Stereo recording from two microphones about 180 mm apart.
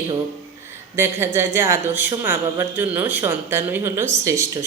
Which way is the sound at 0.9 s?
15° right (ahead or behind).